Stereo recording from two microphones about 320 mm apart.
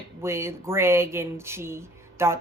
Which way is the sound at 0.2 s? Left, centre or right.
Centre.